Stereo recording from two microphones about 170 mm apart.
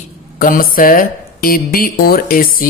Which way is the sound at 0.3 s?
55° left (ahead or behind).